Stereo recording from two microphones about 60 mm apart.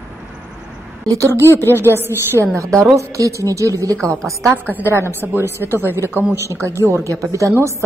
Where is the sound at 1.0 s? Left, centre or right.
Right.